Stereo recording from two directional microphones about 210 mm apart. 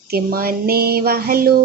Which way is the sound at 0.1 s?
45° right (ahead or behind).